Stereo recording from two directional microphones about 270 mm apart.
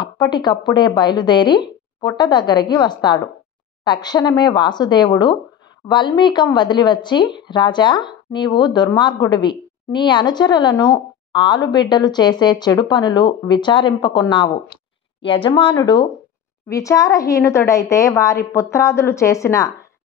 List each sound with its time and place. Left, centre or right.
0.0 s speech: centre